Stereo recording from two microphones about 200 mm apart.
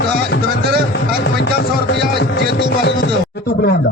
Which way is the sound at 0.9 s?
55° left (ahead or behind).